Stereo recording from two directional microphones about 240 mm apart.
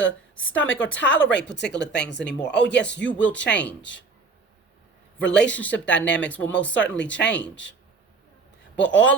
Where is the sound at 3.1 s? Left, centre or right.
Centre.